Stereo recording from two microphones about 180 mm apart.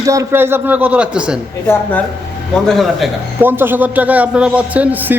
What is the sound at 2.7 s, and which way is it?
Speech, centre (ahead or behind).